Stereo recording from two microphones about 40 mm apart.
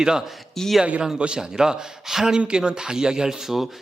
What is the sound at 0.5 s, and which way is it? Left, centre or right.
Speech, centre.